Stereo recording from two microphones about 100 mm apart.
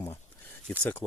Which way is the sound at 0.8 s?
15° left (ahead or behind).